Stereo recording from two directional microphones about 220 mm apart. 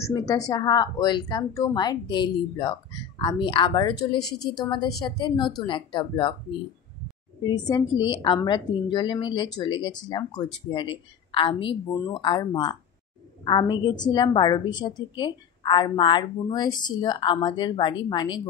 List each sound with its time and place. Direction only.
0.0 s a woman's voice: 15° left (ahead or behind)
7.4 s a woman's voice: 20° left (ahead or behind)